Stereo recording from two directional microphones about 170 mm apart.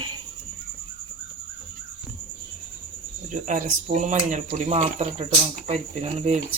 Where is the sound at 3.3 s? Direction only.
50° right (ahead or behind).